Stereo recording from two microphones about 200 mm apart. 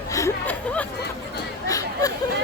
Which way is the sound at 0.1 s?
15° left (ahead or behind).